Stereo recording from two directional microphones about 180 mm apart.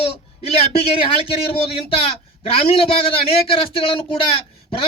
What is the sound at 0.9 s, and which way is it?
Speech, 30° left (ahead or behind).